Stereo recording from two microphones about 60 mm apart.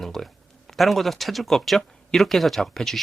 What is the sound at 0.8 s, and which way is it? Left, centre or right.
Speech, centre.